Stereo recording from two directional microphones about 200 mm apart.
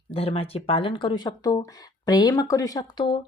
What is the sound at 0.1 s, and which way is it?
Speech, 30° left (ahead or behind).